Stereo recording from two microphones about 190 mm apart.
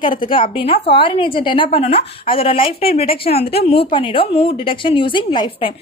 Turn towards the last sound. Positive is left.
turn(degrees=25)  # may be behind; listen again after turning